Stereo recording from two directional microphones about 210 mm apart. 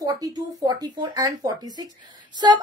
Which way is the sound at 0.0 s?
15° right (ahead or behind).